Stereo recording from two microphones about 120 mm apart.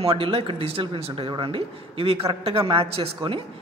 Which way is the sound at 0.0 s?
50° right (ahead or behind).